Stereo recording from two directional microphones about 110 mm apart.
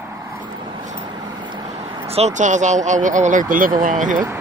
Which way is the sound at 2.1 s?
80° right.